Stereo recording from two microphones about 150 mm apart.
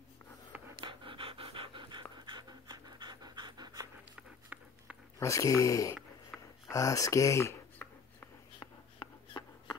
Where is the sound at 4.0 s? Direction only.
10° right (ahead or behind).